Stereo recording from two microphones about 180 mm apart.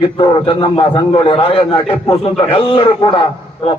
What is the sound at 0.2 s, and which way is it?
A man's voice, 25° left (ahead or behind).